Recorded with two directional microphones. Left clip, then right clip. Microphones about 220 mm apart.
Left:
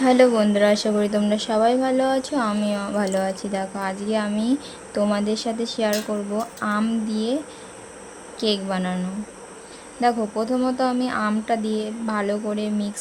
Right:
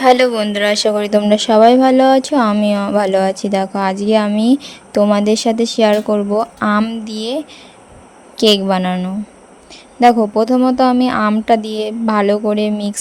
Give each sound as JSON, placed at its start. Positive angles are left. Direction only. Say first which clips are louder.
{"t": 0.0, "sound": "speech", "louder": "right 5 dB", "side_deg": -35}